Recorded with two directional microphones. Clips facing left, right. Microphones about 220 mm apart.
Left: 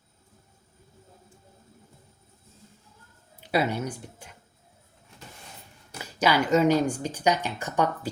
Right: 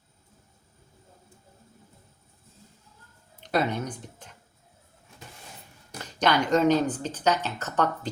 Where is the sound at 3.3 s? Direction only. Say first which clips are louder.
Left 1 dB; 10° left (ahead or behind).